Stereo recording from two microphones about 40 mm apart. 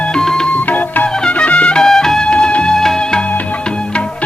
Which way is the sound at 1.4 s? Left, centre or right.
Left.